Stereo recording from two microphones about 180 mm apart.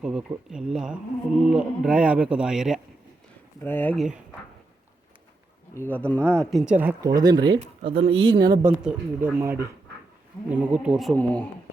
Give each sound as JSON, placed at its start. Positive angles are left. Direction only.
{"t": 0.0, "sound": "speech", "side_deg": -5}
{"t": 3.6, "sound": "speech", "side_deg": 10}
{"t": 3.9, "sound": "speech", "side_deg": -5}
{"t": 5.7, "sound": "speech", "side_deg": 10}
{"t": 6.7, "sound": "speech", "side_deg": -15}
{"t": 7.6, "sound": "speech", "side_deg": -35}
{"t": 8.6, "sound": "speech", "side_deg": -10}